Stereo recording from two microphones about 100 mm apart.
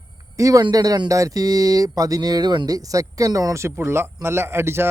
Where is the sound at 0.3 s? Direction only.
35° right (ahead or behind).